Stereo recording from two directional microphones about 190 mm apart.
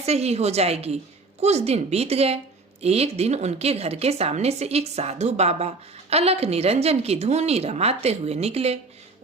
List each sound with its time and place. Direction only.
0.0 s a woman's voice: 35° right (ahead or behind)